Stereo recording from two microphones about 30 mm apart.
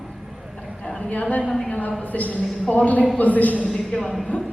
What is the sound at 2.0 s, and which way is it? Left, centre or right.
Speech, left.